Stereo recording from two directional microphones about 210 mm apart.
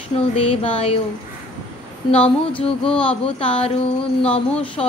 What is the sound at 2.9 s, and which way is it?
Speech, 5° left (ahead or behind).